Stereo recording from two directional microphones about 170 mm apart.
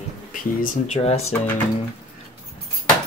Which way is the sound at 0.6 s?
45° left (ahead or behind).